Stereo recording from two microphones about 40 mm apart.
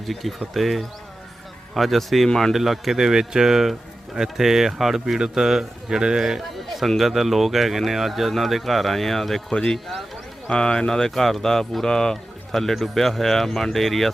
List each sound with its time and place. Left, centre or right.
0.1 s speech: centre
6.7 s speech: centre
9.5 s speech: centre
12.1 s bird: centre
12.7 s speech: centre